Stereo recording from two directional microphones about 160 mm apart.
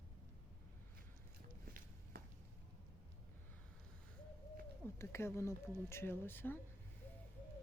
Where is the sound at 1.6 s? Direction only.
65° right (ahead or behind).